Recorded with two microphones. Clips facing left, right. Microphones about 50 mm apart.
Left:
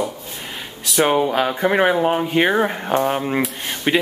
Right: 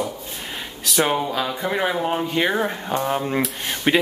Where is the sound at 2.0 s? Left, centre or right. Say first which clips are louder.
Left 4 dB; left.